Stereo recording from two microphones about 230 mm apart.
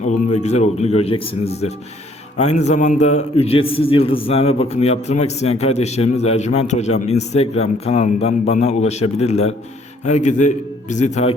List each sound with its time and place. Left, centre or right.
0.0 s a man's voice: left